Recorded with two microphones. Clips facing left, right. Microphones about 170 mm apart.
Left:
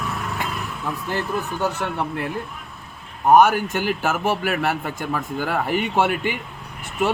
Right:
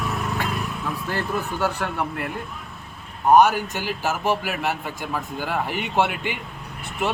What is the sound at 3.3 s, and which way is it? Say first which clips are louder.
A man's voice: left 1 dB; 50° left (ahead or behind).